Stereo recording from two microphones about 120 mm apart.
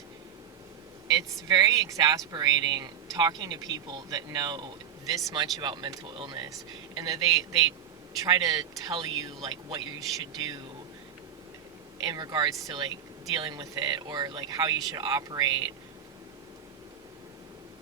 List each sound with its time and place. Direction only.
1.0 s speech: 35° right (ahead or behind)
12.0 s speech: 35° right (ahead or behind)